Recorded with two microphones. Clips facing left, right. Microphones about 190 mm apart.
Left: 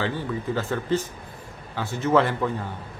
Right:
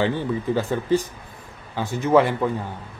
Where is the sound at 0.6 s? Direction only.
15° right (ahead or behind).